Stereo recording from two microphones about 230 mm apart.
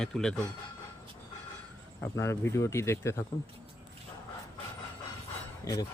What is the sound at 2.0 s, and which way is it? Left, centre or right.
Speech, centre.